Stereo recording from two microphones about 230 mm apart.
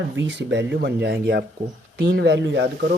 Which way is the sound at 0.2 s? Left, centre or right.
Right.